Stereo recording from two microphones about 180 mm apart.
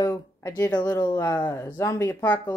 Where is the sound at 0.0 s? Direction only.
15° left (ahead or behind).